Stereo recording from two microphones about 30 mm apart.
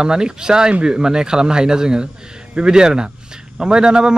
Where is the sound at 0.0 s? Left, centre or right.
Right.